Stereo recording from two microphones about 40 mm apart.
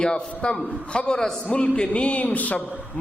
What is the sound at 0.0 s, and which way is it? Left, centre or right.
A man's voice, left.